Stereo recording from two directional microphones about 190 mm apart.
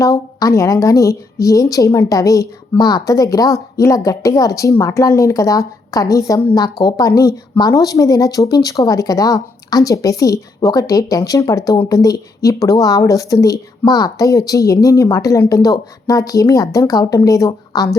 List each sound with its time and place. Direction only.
0.0 s speech: 20° left (ahead or behind)